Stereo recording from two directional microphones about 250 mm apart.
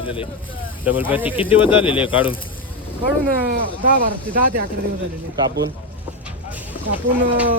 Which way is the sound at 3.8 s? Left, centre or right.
Right.